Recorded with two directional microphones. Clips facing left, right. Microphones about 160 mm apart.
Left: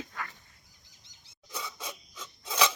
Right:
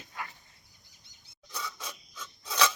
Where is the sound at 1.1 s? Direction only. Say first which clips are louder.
Even; 90° left.